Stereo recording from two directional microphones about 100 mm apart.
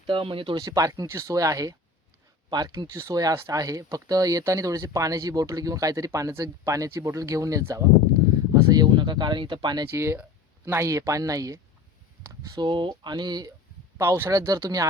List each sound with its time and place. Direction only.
0.0 s speech: 60° right (ahead or behind)
0.5 s speech: 35° right (ahead or behind)
8.7 s speech: 45° right (ahead or behind)
9.9 s speech: 25° right (ahead or behind)
12.5 s speech: 55° right (ahead or behind)
14.0 s speech: 30° right (ahead or behind)